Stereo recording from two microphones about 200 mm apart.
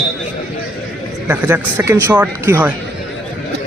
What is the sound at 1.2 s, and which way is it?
Speech, 10° right (ahead or behind).